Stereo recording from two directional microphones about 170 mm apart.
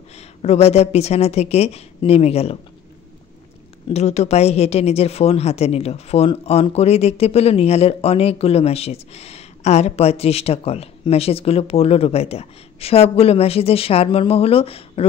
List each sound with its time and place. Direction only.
0.4 s speech: 40° left (ahead or behind)
3.9 s speech: 40° left (ahead or behind)